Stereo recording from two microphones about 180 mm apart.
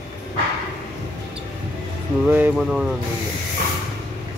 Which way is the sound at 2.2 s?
5° right (ahead or behind).